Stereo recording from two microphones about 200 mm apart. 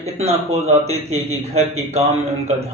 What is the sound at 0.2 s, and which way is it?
Speech, 30° right (ahead or behind).